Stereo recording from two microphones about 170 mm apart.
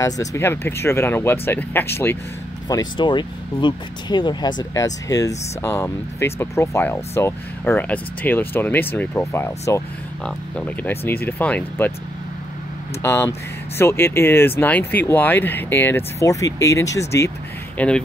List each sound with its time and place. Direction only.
0.0 s speech: 20° left (ahead or behind)
2.7 s speech: 25° left (ahead or behind); by 11.9 s 10° left (ahead or behind)
13.0 s speech: 15° left (ahead or behind)
17.7 s speech: 5° left (ahead or behind)